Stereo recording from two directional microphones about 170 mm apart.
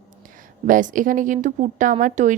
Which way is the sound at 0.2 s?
50° right (ahead or behind).